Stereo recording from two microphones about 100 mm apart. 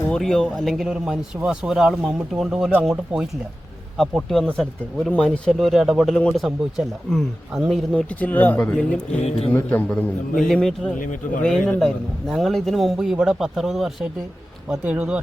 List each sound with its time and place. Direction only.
0.2 s a man's voice: 5° left (ahead or behind)
7.9 s a man's voice: 15° left (ahead or behind)
9.9 s a man's voice: 5° left (ahead or behind); by 15.2 s 10° right (ahead or behind)